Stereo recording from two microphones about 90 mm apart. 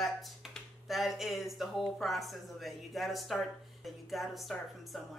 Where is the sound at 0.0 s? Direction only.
Centre (ahead or behind).